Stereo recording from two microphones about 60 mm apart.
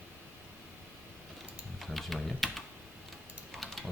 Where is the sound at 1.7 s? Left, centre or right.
Centre.